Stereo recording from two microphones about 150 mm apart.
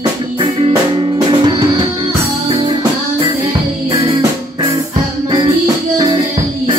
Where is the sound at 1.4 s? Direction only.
30° right (ahead or behind).